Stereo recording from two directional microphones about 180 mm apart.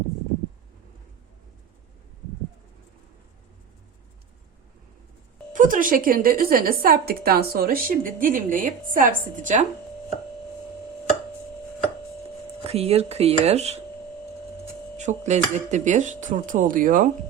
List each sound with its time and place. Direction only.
5.5 s a woman's voice: 50° right (ahead or behind)
12.6 s speech: 35° right (ahead or behind)
14.9 s a woman's voice: 40° right (ahead or behind)